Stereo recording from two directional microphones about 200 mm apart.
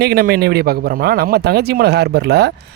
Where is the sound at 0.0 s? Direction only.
50° right (ahead or behind).